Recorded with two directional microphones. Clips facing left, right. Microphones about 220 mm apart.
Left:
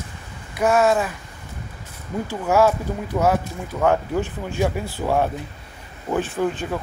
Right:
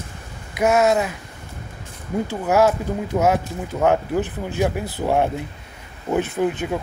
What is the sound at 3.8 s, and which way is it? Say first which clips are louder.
Speech: right 1 dB; 20° right (ahead or behind).